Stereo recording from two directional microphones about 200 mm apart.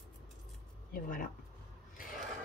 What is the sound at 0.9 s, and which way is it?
Speech, 45° left (ahead or behind).